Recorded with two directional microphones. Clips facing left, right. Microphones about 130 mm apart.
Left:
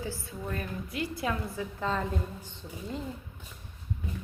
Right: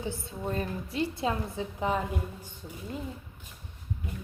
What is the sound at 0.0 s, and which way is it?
A woman's voice, 25° right (ahead or behind).